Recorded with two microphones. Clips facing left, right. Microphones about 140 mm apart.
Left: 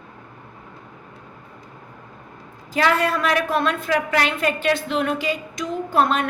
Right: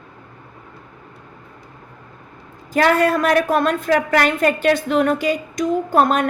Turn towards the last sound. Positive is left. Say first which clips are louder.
# right 3 dB
turn(degrees=-45)  # may be behind; listen again after turning